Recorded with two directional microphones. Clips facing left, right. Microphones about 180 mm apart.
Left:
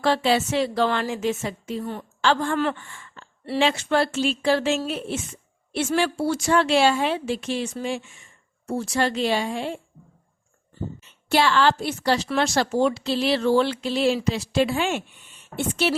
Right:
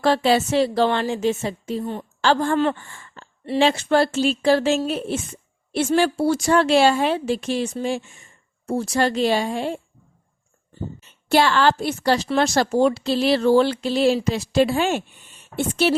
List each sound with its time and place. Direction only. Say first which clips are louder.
0.0 s a woman's voice: right 3 dB; 40° right (ahead or behind)
1.8 s a woman's voice: right 3 dB; 20° right (ahead or behind)
2.2 s a woman's voice: right 3 dB; 40° right (ahead or behind)
11.0 s a woman's voice: right 3 dB; 45° right (ahead or behind)